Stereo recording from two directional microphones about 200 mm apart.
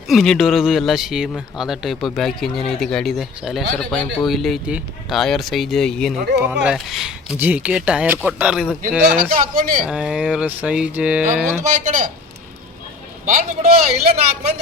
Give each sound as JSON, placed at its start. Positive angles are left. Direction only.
{"t": 0.1, "sound": "speech", "side_deg": 0}
{"t": 9.0, "sound": "speech", "side_deg": -40}
{"t": 9.8, "sound": "speech", "side_deg": -5}
{"t": 11.7, "sound": "speech", "side_deg": -40}
{"t": 13.2, "sound": "speech", "side_deg": -35}